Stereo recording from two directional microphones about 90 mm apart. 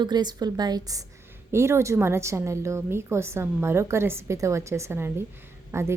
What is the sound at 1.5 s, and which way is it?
A woman's voice, 30° right (ahead or behind).